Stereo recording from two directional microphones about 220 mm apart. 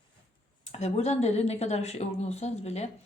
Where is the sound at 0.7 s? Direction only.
30° left (ahead or behind).